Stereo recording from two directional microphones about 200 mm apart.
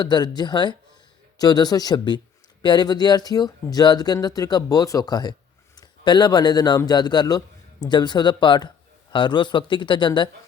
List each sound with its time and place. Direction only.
0.0 s speech: 20° left (ahead or behind)